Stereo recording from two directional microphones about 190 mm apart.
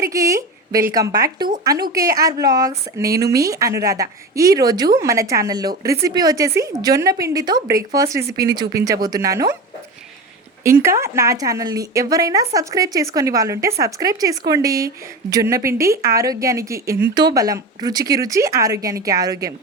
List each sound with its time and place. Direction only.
0.0 s a sound: 15° right (ahead or behind)
0.9 s a woman's voice: 20° right (ahead or behind)
10.6 s a woman's voice: 15° right (ahead or behind)